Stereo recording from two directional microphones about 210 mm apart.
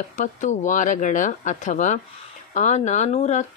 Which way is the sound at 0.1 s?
35° left (ahead or behind).